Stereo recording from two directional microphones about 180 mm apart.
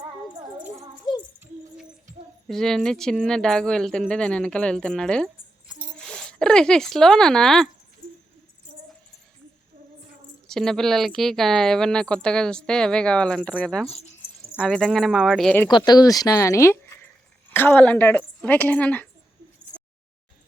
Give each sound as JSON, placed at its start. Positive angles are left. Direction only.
{"t": 2.5, "sound": "speech", "side_deg": 0}
{"t": 10.4, "sound": "speech", "side_deg": 5}
{"t": 13.8, "sound": "speech", "side_deg": 35}
{"t": 14.6, "sound": "speech", "side_deg": 5}
{"t": 15.6, "sound": "speech", "side_deg": 20}